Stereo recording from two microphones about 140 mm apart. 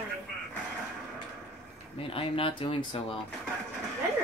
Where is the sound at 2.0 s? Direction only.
40° left (ahead or behind).